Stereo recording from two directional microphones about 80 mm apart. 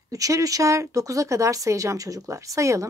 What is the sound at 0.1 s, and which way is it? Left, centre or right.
Speech, right.